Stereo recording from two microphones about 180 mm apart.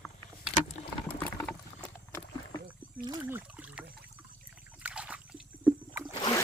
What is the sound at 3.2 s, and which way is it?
Rowboat, 10° right (ahead or behind).